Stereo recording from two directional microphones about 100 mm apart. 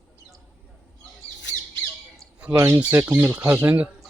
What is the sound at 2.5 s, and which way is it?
Speech, 25° right (ahead or behind).